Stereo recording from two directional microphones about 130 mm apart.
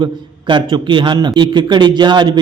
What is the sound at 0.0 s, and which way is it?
A man's voice, 35° right (ahead or behind).